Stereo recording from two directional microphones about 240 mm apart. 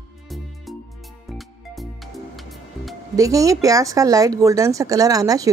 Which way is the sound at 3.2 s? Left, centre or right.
Centre.